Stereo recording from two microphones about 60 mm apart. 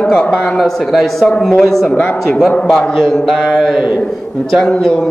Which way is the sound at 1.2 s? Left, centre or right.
Centre.